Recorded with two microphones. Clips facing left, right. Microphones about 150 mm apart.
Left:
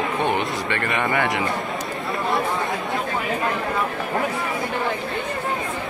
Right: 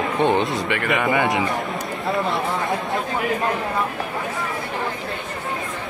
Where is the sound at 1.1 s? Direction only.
20° right (ahead or behind).